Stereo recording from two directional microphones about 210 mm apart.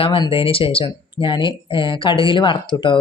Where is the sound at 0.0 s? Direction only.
25° left (ahead or behind).